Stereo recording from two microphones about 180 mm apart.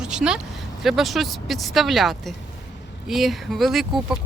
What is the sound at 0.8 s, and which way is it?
Speech, centre (ahead or behind).